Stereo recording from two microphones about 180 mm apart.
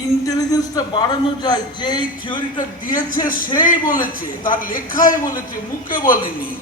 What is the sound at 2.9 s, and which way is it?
A man's voice, 50° left (ahead or behind).